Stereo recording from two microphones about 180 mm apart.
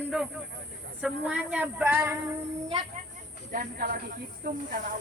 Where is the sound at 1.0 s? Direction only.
5° right (ahead or behind).